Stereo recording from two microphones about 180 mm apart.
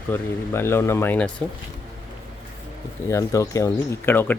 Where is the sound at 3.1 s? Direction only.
20° left (ahead or behind).